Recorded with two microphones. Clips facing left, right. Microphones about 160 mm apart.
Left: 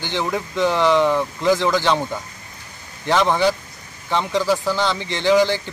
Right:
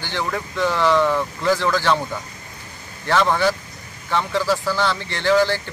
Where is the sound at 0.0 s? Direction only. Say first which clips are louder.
Left 2 dB; 20° left (ahead or behind).